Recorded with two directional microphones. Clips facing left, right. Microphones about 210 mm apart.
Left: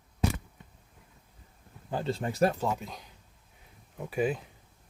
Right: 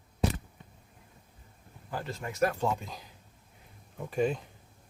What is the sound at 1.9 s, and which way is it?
Speech, 30° left (ahead or behind).